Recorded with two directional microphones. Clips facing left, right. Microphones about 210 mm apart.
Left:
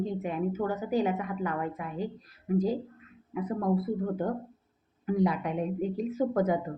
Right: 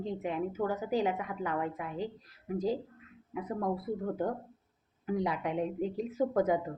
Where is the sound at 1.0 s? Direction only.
15° right (ahead or behind).